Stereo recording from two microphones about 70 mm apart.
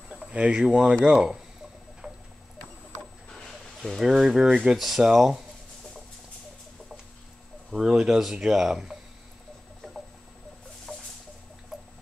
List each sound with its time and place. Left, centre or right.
0.2 s speech: centre
2.0 s a sound: centre
3.8 s speech: centre
7.7 s speech: centre
10.9 s music: centre